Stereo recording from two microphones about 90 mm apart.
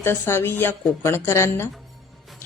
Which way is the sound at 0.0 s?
25° left (ahead or behind).